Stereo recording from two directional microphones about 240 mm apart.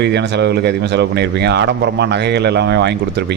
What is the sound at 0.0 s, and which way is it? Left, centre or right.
Speech, right.